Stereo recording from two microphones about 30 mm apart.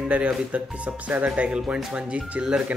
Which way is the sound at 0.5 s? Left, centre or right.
Right.